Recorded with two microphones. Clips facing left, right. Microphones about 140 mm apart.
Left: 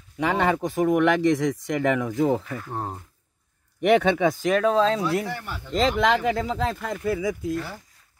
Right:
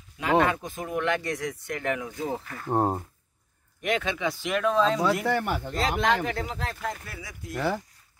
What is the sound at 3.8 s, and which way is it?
Speech, 65° left (ahead or behind).